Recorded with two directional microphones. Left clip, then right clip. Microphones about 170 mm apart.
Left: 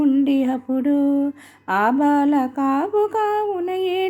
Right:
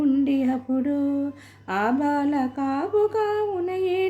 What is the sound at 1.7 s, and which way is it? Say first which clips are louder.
Speech: left 6 dB; 30° left (ahead or behind).